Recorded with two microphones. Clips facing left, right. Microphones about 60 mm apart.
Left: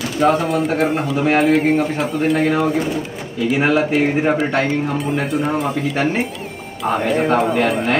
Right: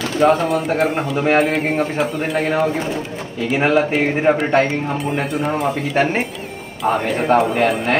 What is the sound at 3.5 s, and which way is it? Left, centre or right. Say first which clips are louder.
Speech: right 1 dB; right.